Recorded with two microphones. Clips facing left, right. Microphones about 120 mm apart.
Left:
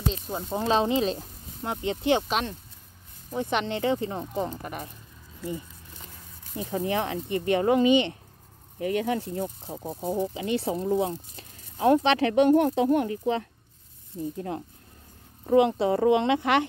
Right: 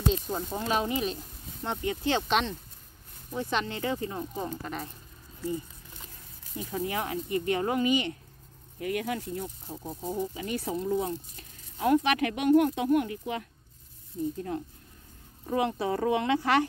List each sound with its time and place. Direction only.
0.0 s speech: 5° left (ahead or behind)
0.6 s speech: 25° left (ahead or behind)
2.2 s speech: 5° left (ahead or behind)
3.3 s speech: 20° left (ahead or behind)
4.4 s speech: 15° left (ahead or behind)
6.6 s speech: 35° left (ahead or behind)
15.5 s speech: 25° left (ahead or behind)